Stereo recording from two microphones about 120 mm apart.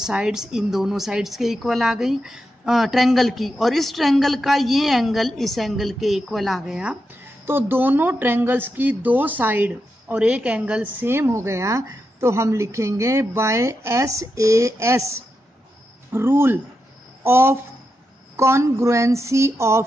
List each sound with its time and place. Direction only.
0.0 s a woman's voice: 5° right (ahead or behind)
7.4 s speech: 20° right (ahead or behind)